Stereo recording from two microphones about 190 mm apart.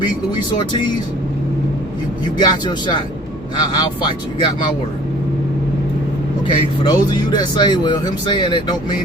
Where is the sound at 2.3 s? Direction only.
25° left (ahead or behind).